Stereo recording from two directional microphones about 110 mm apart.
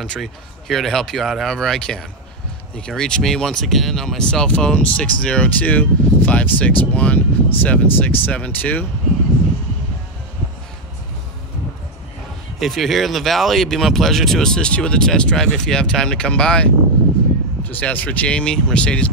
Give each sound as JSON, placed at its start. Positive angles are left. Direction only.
{"t": 0.0, "sound": "speech", "side_deg": 5}
{"t": 12.5, "sound": "speech", "side_deg": 0}